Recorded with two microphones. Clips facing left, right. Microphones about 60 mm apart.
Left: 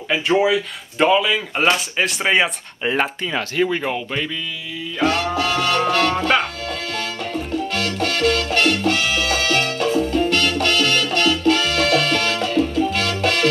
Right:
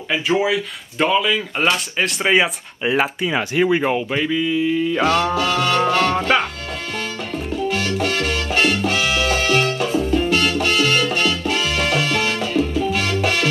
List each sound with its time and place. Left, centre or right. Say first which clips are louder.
0.1 s speech: left 2 dB; centre
3.3 s speech: right 3 dB; centre
4.6 s mantra: right 4 dB; right
5.6 s speech: right 1 dB; centre
7.6 s salsa music: right 5 dB; centre